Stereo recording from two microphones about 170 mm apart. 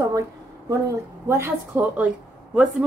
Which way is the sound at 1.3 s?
15° right (ahead or behind).